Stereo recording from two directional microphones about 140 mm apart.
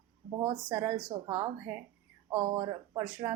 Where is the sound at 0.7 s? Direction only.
15° right (ahead or behind).